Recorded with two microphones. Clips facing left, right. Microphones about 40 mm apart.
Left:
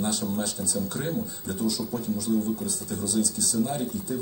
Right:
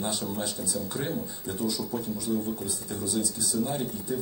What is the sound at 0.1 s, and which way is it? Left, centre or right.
Speech, centre.